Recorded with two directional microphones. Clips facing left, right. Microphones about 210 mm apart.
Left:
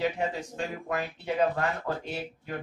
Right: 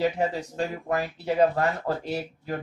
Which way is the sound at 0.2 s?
40° right (ahead or behind).